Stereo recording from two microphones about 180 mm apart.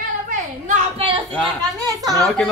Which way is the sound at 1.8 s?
20° right (ahead or behind).